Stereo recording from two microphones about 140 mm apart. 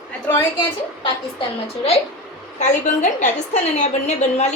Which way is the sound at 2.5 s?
60° left (ahead or behind).